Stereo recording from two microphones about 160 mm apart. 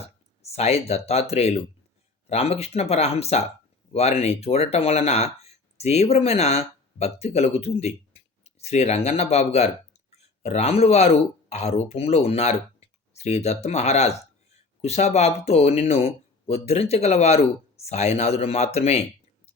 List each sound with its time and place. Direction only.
0.4 s speech: 40° left (ahead or behind)